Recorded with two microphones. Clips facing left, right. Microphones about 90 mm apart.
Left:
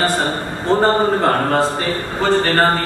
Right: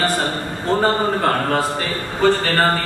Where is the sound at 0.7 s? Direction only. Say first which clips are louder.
Left 3 dB; 25° left (ahead or behind).